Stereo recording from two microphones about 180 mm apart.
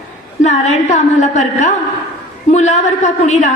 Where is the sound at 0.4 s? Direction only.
40° left (ahead or behind).